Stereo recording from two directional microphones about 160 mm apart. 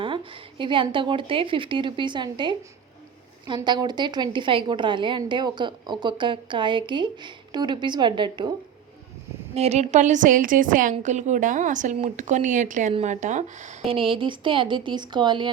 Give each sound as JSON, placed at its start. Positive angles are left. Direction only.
{"t": 0.6, "sound": "a woman's voice", "side_deg": -30}
{"t": 9.6, "sound": "a woman's voice", "side_deg": -40}
{"t": 13.9, "sound": "a woman's voice", "side_deg": -35}